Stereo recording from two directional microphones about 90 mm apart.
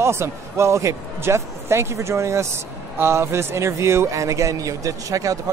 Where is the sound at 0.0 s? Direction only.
30° right (ahead or behind).